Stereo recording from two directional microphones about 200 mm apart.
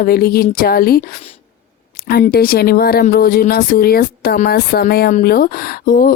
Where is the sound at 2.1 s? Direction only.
50° left (ahead or behind).